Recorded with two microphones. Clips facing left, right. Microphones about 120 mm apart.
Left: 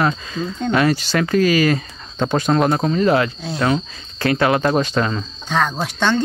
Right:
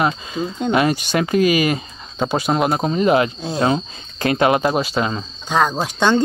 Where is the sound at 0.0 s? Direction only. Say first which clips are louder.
Even; 15° right (ahead or behind).